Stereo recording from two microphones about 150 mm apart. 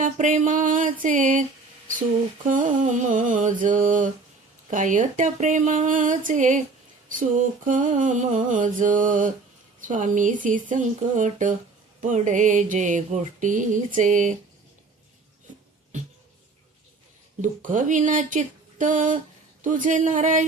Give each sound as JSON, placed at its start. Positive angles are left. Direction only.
{"t": 0.0, "sound": "mantra", "side_deg": -60}
{"t": 2.5, "sound": "mantra", "side_deg": -60}
{"t": 17.4, "sound": "mantra", "side_deg": -60}